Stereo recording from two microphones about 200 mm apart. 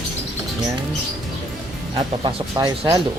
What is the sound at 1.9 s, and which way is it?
Speech, 20° right (ahead or behind).